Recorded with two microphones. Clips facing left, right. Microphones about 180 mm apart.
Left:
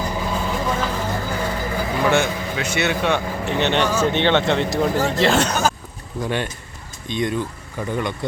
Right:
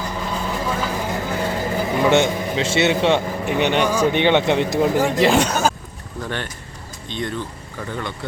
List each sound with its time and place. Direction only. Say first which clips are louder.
0.2 s vehicle: right 1 dB; centre (ahead or behind)
1.4 s vehicle: right 2 dB; 25° right (ahead or behind)
3.5 s speech: right 1 dB; 10° right (ahead or behind)
6.2 s speech: left 4 dB; 15° left (ahead or behind)